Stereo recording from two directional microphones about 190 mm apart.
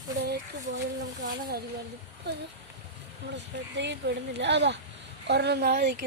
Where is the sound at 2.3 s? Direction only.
60° right (ahead or behind).